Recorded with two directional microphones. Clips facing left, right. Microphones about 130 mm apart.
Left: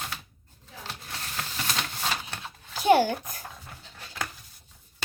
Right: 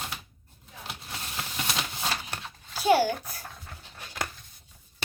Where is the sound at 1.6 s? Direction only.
5° right (ahead or behind).